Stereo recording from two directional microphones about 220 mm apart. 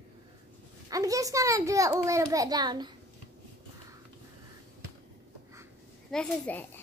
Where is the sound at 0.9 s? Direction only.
15° right (ahead or behind).